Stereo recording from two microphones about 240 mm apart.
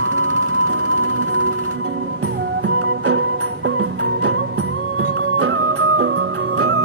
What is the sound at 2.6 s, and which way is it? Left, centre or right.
Music, right.